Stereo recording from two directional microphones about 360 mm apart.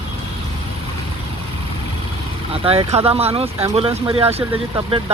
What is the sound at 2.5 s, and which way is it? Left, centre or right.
Speech, centre.